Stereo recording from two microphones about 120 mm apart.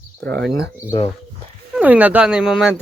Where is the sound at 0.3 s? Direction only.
10° left (ahead or behind).